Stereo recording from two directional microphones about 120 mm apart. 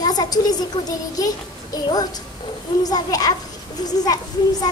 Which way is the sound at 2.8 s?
30° left (ahead or behind).